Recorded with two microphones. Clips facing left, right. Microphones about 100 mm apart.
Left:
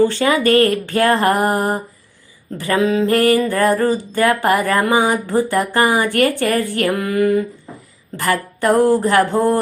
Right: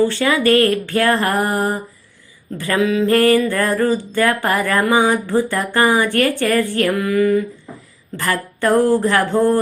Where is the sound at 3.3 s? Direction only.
30° left (ahead or behind).